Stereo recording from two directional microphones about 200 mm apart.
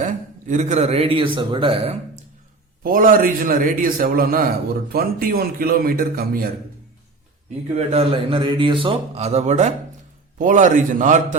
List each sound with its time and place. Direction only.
0.0 s a man's voice: 35° right (ahead or behind)
2.8 s a man's voice: 45° right (ahead or behind)
7.8 s a man's voice: 30° right (ahead or behind)